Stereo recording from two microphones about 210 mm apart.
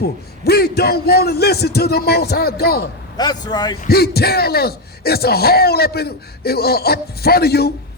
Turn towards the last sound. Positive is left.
turn(degrees=50)  # may be behind; listen again after turning